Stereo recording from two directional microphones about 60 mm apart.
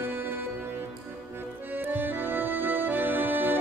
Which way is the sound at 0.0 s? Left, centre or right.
Right.